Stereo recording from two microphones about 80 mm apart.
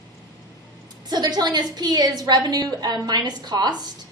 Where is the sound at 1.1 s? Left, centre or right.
Right.